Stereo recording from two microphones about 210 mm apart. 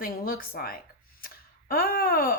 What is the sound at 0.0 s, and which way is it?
Speech, 45° left (ahead or behind).